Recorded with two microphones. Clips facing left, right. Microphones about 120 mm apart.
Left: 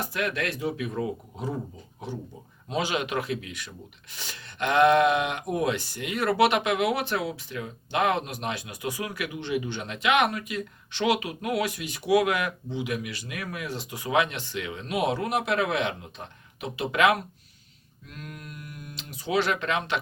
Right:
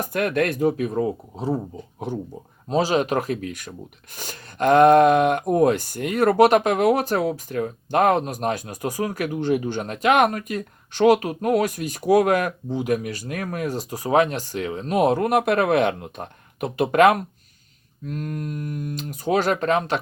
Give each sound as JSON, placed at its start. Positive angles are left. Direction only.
{"t": 0.0, "sound": "speech", "side_deg": -50}
{"t": 2.6, "sound": "speech", "side_deg": -35}